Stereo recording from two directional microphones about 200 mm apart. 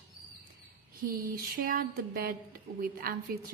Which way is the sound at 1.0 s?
45° right (ahead or behind).